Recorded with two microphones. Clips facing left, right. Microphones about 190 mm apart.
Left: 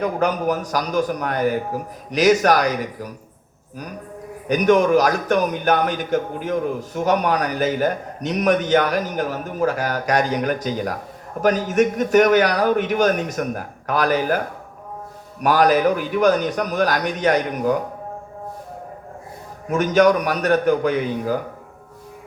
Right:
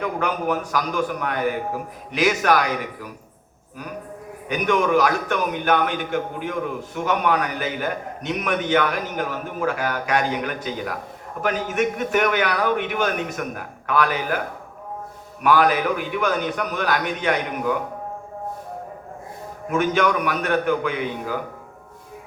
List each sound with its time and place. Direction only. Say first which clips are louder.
0.0 s a man's voice: left 4 dB; 40° left (ahead or behind)
4.4 s a man's voice: left 5 dB; 40° left (ahead or behind)
19.7 s a man's voice: left 5 dB; 40° left (ahead or behind)